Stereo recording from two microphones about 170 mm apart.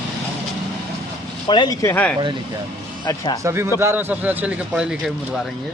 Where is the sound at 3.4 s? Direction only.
15° right (ahead or behind).